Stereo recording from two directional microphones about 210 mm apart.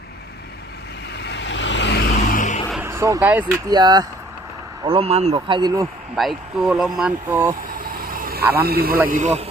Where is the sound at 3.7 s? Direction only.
20° right (ahead or behind).